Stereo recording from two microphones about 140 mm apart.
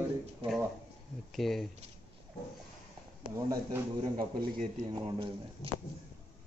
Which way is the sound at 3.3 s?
20° right (ahead or behind).